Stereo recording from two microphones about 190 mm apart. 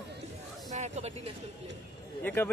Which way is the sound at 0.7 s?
35° right (ahead or behind).